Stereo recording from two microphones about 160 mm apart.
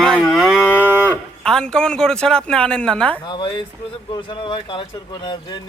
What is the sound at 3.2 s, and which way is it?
Speech, 30° left (ahead or behind).